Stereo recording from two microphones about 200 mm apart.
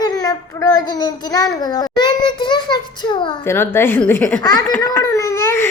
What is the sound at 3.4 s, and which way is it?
A child's voice, 10° left (ahead or behind).